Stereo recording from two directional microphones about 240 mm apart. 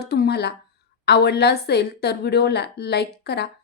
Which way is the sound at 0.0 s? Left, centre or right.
Left.